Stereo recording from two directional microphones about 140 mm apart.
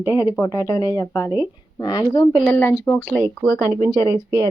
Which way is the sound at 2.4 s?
15° left (ahead or behind).